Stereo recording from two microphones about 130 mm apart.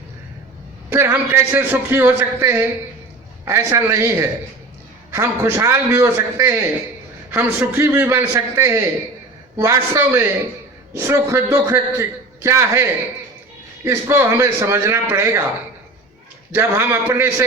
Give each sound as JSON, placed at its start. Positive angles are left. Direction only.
{"t": 0.9, "sound": "a man's voice", "side_deg": -15}
{"t": 16.5, "sound": "a man's voice", "side_deg": -20}